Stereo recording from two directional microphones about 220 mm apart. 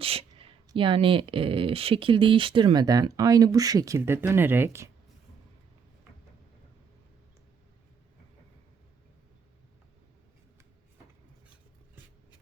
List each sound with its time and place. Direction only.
0.0 s speech: 25° right (ahead or behind); by 4.9 s 10° right (ahead or behind)